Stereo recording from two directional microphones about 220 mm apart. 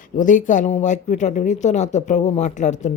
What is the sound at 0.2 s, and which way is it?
Speech, 35° left (ahead or behind).